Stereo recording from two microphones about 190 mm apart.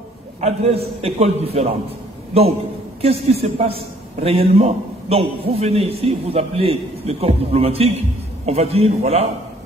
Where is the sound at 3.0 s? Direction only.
30° right (ahead or behind).